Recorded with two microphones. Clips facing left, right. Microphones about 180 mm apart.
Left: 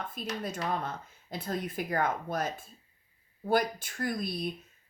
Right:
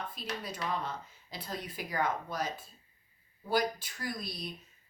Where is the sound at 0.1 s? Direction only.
50° left (ahead or behind).